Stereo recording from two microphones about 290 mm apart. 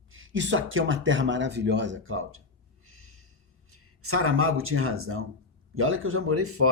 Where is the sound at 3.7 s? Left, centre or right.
Right.